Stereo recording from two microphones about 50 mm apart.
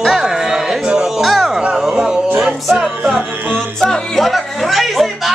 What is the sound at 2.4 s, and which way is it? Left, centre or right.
Music, centre.